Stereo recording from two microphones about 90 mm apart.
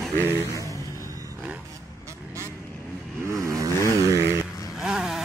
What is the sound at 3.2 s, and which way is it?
Vehicle, 35° right (ahead or behind).